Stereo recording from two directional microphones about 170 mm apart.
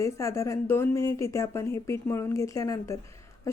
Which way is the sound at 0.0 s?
20° left (ahead or behind).